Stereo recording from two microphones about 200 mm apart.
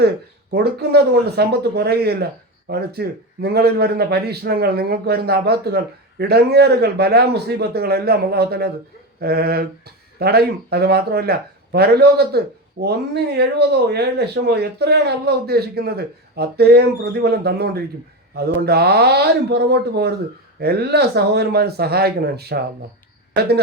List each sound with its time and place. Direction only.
0.5 s a man's voice: 55° right (ahead or behind)